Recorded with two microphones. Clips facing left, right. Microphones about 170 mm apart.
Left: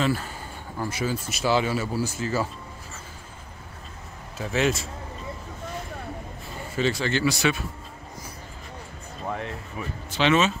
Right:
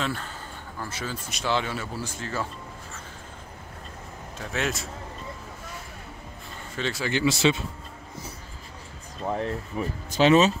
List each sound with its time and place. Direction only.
0.0 s speech: 5° left (ahead or behind)
4.4 s a man's voice: centre (ahead or behind)
6.7 s speech: centre (ahead or behind)
7.1 s speech: 20° right (ahead or behind)
9.3 s speech: 35° right (ahead or behind)